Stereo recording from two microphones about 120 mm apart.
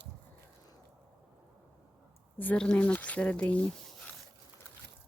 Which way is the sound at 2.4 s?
10° left (ahead or behind).